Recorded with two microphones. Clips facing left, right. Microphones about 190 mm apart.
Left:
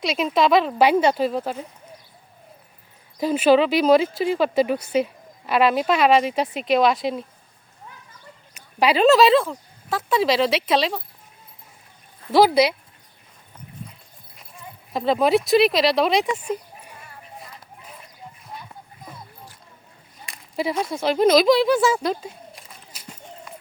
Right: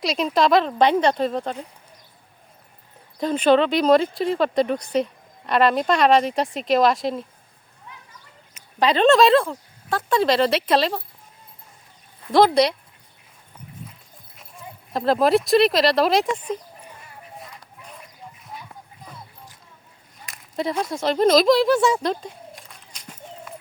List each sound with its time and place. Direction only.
0.0 s speech: centre (ahead or behind)
3.2 s speech: 5° left (ahead or behind)
8.8 s speech: 5° left (ahead or behind)
12.3 s speech: 5° left (ahead or behind)
14.3 s speech: centre (ahead or behind)
17.3 s a sound: centre (ahead or behind)
20.2 s a sound: centre (ahead or behind)